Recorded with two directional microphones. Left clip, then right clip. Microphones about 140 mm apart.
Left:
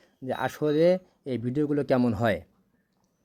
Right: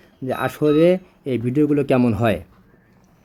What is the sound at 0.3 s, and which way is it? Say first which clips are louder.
A man's voice: right 8 dB; 30° left (ahead or behind).